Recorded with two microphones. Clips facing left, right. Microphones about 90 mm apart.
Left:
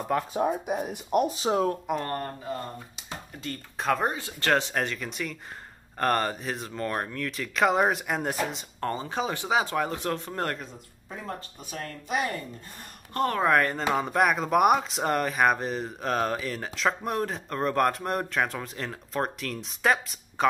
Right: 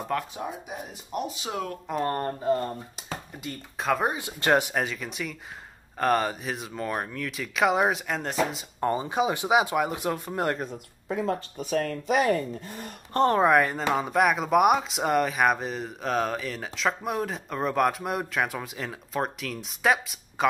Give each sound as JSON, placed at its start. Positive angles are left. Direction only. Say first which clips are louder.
{"t": 0.3, "sound": "chopping", "louder": "left 8 dB", "side_deg": 50}
{"t": 1.3, "sound": "speech", "louder": "left 7 dB", "side_deg": 35}
{"t": 3.7, "sound": "speech", "louder": "right 1 dB", "side_deg": 0}
{"t": 4.1, "sound": "speech", "louder": "right 2 dB", "side_deg": -15}
{"t": 8.8, "sound": "speech", "louder": "right 4 dB", "side_deg": -15}
{"t": 11.1, "sound": "speech", "louder": "right 9 dB", "side_deg": -90}
{"t": 13.1, "sound": "speech", "louder": "right 5 dB", "side_deg": -25}
{"t": 13.5, "sound": "speech", "louder": "right 1 dB", "side_deg": -10}